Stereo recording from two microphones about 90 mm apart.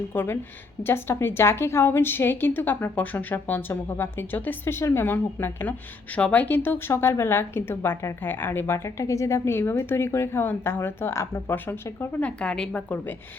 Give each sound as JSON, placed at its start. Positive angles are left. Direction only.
{"t": 0.1, "sound": "a woman's voice", "side_deg": 25}
{"t": 12.4, "sound": "a woman's voice", "side_deg": 10}